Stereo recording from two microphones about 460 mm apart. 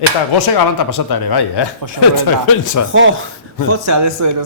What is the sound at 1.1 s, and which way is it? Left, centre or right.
Speech, left.